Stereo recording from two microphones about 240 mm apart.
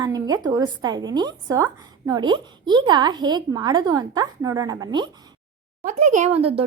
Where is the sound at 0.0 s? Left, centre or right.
Centre.